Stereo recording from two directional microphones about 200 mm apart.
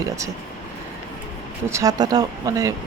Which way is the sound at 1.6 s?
15° right (ahead or behind).